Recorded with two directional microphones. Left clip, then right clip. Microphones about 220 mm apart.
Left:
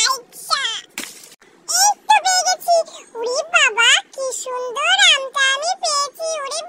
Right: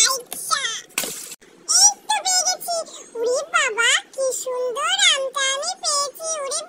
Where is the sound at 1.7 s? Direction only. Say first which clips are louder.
Left 1 dB; 60° left (ahead or behind).